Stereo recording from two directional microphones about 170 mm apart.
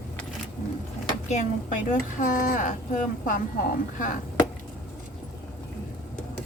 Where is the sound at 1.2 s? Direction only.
45° left (ahead or behind).